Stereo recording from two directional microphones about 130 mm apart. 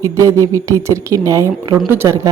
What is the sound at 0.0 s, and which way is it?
A woman's voice, 25° right (ahead or behind).